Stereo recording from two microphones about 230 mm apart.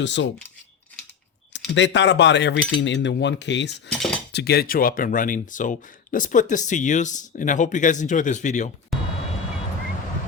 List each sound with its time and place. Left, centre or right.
0.0 s cutlery: left
1.5 s cutlery: left
4.3 s speech: left
8.9 s vehicle: centre